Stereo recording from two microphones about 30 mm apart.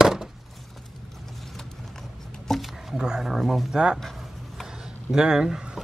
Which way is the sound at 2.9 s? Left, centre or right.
Right.